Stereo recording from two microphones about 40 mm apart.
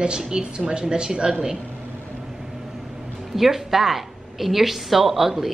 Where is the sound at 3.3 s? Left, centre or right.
Centre.